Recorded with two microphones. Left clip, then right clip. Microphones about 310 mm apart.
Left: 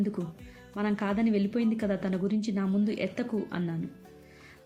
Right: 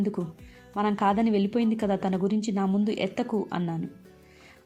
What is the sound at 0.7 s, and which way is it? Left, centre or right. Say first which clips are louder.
A woman's voice: right 7 dB; centre.